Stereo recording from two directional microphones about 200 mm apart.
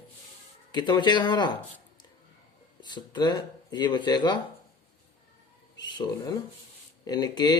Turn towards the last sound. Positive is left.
turn(degrees=20)  # may be behind; listen again after turning